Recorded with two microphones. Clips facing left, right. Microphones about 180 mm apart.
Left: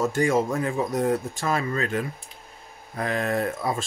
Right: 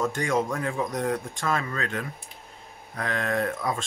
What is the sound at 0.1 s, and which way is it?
Speech, 5° left (ahead or behind).